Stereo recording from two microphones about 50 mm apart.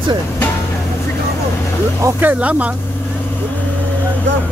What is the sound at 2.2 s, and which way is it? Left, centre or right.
Speech, right.